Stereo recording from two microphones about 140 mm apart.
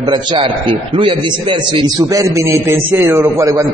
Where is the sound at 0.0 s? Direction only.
40° right (ahead or behind).